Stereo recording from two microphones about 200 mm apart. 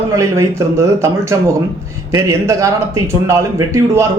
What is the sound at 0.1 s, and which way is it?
A man's voice, 15° right (ahead or behind).